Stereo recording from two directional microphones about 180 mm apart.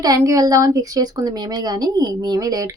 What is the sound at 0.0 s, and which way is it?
A woman's voice, 20° right (ahead or behind).